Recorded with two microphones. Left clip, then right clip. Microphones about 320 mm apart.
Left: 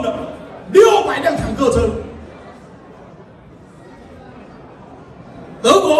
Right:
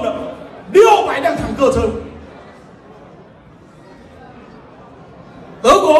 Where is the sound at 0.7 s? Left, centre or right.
Centre.